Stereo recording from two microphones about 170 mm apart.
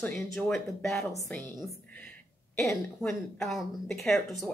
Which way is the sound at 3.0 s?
Centre (ahead or behind).